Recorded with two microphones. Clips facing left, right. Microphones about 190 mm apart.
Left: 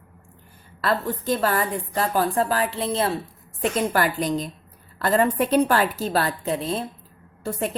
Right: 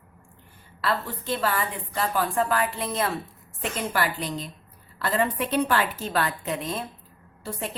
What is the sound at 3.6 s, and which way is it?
A woman's voice, 45° left (ahead or behind).